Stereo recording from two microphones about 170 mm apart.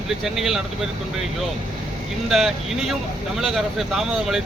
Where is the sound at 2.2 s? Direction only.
Centre (ahead or behind).